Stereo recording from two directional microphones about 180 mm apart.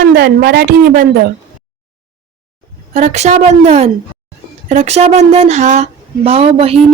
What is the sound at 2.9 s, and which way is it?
Speech, 40° right (ahead or behind).